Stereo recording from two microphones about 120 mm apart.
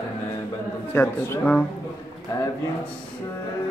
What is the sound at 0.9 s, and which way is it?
Speech, 15° left (ahead or behind).